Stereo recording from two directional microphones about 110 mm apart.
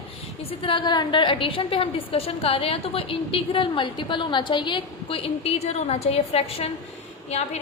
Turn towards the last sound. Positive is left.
turn(degrees=80)